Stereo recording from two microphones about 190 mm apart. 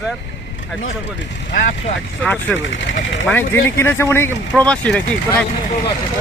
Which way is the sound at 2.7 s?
70° left (ahead or behind).